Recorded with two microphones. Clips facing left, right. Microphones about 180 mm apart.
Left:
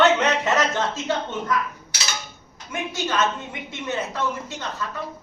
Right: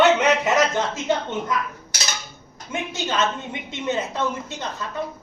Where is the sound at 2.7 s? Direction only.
25° right (ahead or behind).